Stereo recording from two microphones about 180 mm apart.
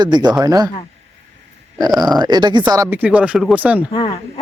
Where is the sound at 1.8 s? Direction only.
20° right (ahead or behind).